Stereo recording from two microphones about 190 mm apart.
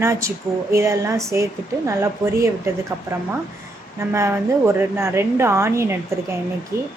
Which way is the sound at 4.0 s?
15° right (ahead or behind).